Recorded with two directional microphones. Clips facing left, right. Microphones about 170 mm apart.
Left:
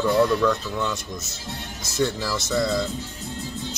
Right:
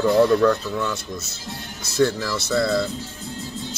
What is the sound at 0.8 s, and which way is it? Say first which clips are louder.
Speech: right 1 dB; 20° left (ahead or behind).